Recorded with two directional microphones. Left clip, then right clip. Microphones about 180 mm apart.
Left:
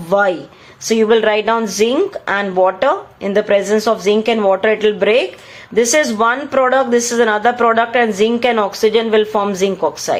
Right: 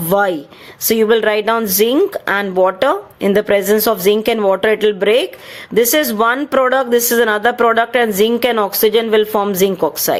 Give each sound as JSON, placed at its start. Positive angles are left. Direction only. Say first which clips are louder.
{"t": 0.1, "sound": "speech", "louder": "left 1 dB", "side_deg": -45}